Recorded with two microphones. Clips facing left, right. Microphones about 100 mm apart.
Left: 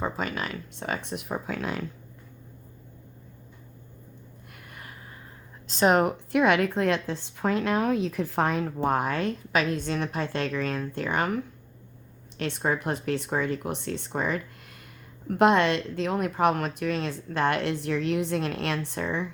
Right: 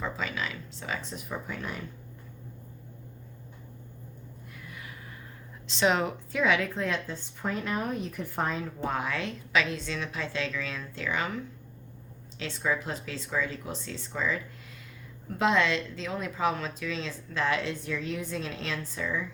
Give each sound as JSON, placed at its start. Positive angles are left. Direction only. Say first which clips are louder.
{"t": 0.0, "sound": "a woman's voice", "louder": "left 3 dB", "side_deg": 50}
{"t": 4.5, "sound": "a sound", "louder": "even", "side_deg": 55}
{"t": 5.6, "sound": "a woman's voice", "louder": "left 5 dB", "side_deg": 45}